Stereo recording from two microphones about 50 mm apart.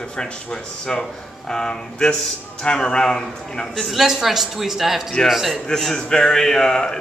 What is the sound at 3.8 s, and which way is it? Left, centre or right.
Speech, centre.